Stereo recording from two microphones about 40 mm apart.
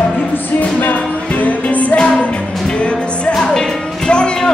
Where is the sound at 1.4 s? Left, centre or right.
Left.